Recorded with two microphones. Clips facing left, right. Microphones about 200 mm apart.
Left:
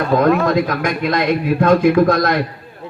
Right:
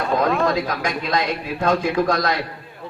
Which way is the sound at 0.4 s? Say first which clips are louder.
Left 5 dB; 55° left (ahead or behind).